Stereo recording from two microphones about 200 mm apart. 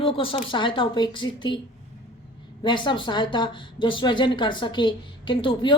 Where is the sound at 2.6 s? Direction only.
25° left (ahead or behind).